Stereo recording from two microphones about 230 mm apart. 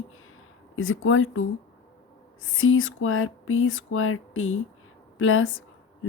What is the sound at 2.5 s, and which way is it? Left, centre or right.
Speech, left.